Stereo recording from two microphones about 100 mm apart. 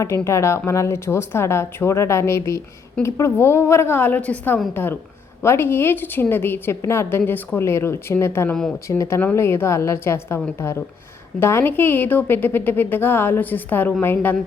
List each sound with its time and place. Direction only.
0.0 s a woman's voice: 30° left (ahead or behind)